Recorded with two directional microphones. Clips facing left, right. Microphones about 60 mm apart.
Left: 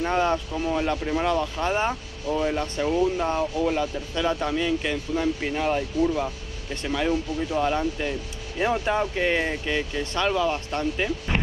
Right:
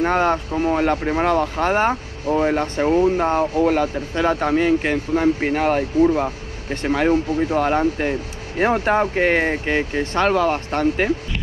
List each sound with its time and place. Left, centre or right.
0.0 s speech: right